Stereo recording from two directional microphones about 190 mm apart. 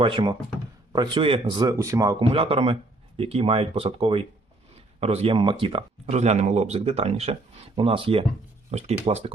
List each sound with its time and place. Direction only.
0.0 s a man's voice: 25° right (ahead or behind)